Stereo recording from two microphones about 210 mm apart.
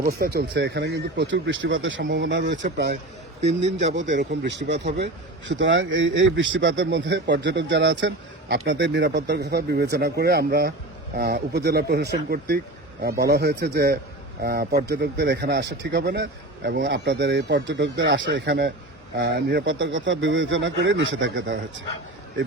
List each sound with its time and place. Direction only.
0.0 s speech: 45° right (ahead or behind)
3.4 s speech: 30° right (ahead or behind)
4.1 s speech: 55° right (ahead or behind)